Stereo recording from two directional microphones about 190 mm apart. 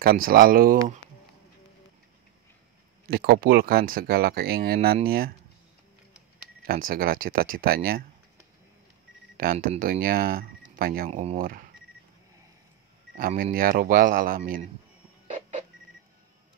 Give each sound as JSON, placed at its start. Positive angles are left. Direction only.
{"t": 0.0, "sound": "speech", "side_deg": -50}
{"t": 3.1, "sound": "speech", "side_deg": -55}
{"t": 6.6, "sound": "speech", "side_deg": -50}
{"t": 9.4, "sound": "speech", "side_deg": -50}
{"t": 11.1, "sound": "speech", "side_deg": -30}
{"t": 13.4, "sound": "speech", "side_deg": -50}